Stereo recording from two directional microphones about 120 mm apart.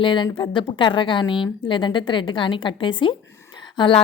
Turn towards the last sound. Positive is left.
turn(degrees=40)  # may be behind; listen again after turning